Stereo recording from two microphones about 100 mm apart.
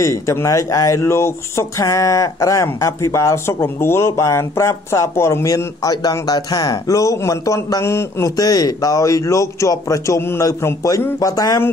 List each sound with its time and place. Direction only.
0.0 s speech: 30° left (ahead or behind)
8.4 s speech: 40° left (ahead or behind)